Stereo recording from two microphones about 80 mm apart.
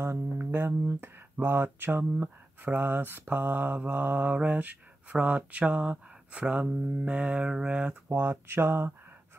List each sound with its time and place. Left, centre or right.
0.0 s speech: right